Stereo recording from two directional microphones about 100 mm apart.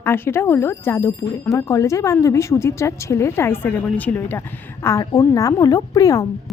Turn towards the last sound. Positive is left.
turn(degrees=35)  # may be behind; listen again after turning